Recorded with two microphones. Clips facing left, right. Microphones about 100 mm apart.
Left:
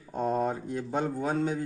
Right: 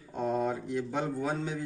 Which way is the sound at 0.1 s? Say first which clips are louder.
Left 2 dB; 40° left (ahead or behind).